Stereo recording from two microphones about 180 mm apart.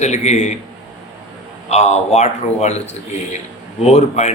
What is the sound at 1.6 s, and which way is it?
A man's voice, 40° left (ahead or behind).